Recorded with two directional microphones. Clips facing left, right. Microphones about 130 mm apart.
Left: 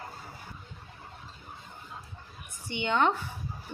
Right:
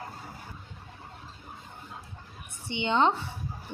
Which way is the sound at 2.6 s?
20° right (ahead or behind).